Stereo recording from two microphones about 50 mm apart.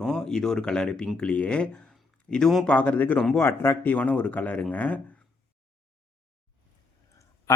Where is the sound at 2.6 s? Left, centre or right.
Left.